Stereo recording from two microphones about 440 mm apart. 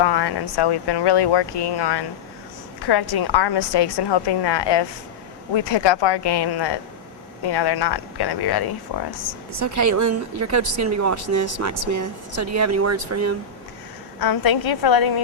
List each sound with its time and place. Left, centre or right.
0.0 s speech: left
9.6 s speech: right
14.2 s a woman's voice: left